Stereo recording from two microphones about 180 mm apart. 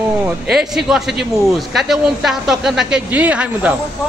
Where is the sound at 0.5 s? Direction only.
5° right (ahead or behind).